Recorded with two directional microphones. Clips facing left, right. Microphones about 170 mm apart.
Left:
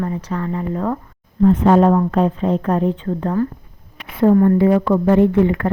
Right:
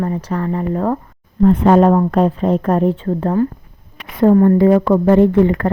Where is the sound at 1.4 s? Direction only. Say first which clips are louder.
Right 2 dB; 60° right (ahead or behind).